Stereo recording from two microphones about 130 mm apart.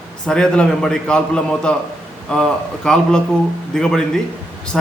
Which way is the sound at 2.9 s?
5° left (ahead or behind).